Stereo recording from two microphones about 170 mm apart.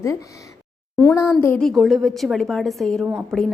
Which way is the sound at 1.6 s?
Centre (ahead or behind).